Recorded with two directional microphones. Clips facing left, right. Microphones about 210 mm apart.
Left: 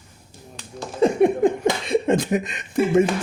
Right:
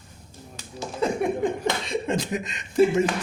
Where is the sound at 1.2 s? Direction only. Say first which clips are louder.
Left 7 dB; 60° left (ahead or behind).